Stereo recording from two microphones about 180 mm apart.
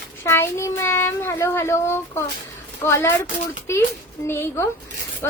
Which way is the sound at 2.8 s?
15° left (ahead or behind).